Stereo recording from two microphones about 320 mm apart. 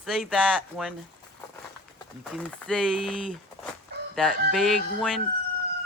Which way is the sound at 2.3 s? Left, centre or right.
Centre.